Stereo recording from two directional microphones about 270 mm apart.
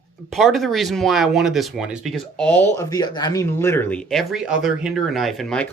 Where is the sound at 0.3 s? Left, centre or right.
Centre.